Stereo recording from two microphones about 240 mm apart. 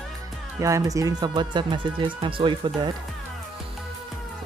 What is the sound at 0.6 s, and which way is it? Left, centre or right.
Speech, centre.